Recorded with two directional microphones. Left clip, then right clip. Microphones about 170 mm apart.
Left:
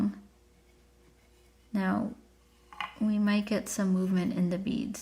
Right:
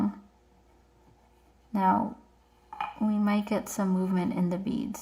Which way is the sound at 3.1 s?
35° left (ahead or behind).